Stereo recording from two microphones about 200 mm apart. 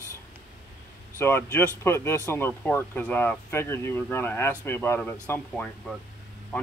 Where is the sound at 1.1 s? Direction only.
15° left (ahead or behind).